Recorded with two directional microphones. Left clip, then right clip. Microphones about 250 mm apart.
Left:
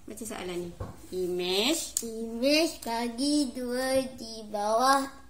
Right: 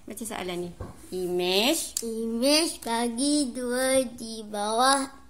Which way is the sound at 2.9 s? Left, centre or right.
Right.